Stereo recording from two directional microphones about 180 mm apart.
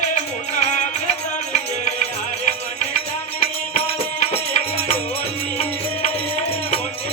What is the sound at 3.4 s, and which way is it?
Music, 35° left (ahead or behind).